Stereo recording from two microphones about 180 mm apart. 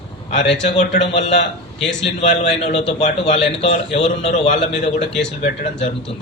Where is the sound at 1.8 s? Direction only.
Centre (ahead or behind).